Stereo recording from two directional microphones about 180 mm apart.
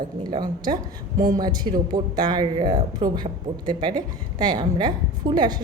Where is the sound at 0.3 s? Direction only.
25° right (ahead or behind).